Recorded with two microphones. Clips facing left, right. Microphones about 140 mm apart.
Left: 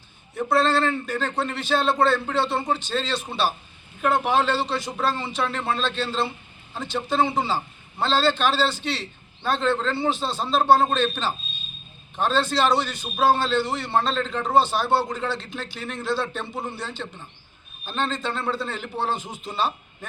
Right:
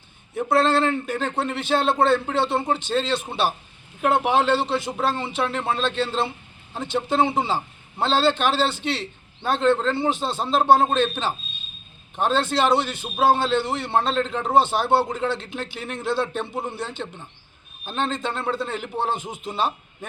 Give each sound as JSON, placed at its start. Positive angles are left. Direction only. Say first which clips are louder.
{"t": 0.5, "sound": "a man's voice", "louder": "right 2 dB", "side_deg": -20}